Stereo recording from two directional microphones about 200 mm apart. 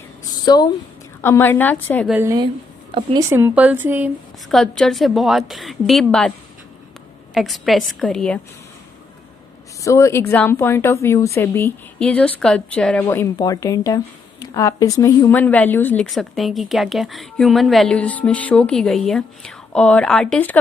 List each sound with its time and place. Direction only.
0.3 s a sound: 20° left (ahead or behind)
1.2 s speech: 10° left (ahead or behind)
2.0 s speech: 10° right (ahead or behind)
2.9 s speech: 25° right (ahead or behind); by 4.1 s 10° right (ahead or behind)
4.5 s speech: centre (ahead or behind)
7.3 s speech: centre (ahead or behind)
9.8 s speech: 15° left (ahead or behind)